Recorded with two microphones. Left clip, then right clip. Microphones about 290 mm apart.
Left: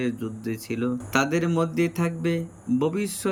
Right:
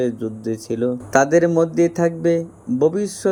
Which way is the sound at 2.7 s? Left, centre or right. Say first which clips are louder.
Right 8 dB; centre.